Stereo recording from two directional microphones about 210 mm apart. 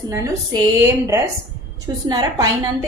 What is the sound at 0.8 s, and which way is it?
A woman's voice, 10° right (ahead or behind).